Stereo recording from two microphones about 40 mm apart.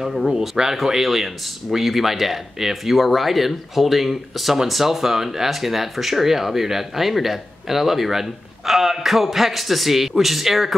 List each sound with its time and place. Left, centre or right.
0.1 s speech: centre